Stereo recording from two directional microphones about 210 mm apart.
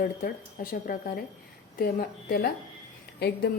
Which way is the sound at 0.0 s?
40° left (ahead or behind).